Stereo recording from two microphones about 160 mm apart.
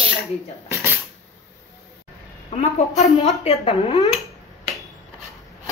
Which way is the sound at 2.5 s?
40° left (ahead or behind).